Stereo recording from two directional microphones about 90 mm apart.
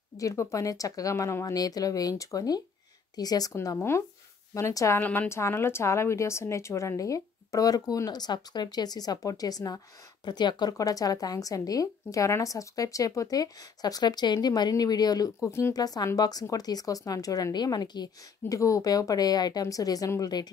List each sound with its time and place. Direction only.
0.2 s a woman's voice: 35° left (ahead or behind)
3.6 s a woman's voice: 30° left (ahead or behind)
5.0 s a woman's voice: 20° left (ahead or behind)
5.3 s a woman's voice: 30° left (ahead or behind); by 18.6 s 50° left (ahead or behind)
18.6 s speech: 40° left (ahead or behind)